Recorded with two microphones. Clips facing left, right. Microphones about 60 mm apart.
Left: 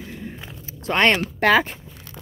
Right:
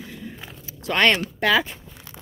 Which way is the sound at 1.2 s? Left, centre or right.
Left.